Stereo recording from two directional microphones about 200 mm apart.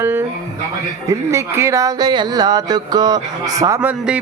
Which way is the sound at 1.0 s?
15° right (ahead or behind).